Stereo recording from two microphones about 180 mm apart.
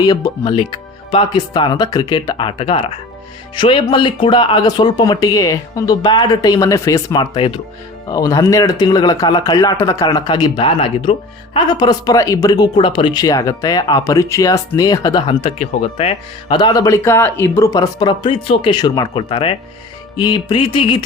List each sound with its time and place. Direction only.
0.0 s a man's voice: 20° left (ahead or behind)